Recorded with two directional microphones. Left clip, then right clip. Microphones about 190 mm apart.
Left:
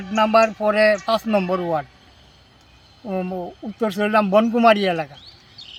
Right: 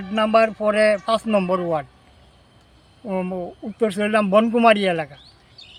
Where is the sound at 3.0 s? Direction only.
25° right (ahead or behind).